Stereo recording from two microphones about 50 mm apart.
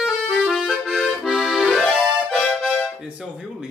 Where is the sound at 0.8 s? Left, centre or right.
Centre.